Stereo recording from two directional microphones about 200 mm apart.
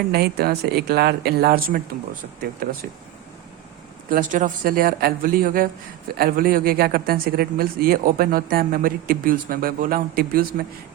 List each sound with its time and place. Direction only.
0.1 s speech: 50° right (ahead or behind)
4.1 s speech: 40° right (ahead or behind)